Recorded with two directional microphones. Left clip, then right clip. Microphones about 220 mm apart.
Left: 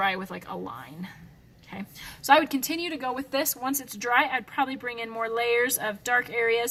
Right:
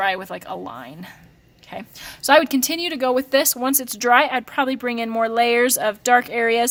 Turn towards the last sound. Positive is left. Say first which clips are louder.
# right 6 dB
turn(degrees=-45)  # may be behind; listen again after turning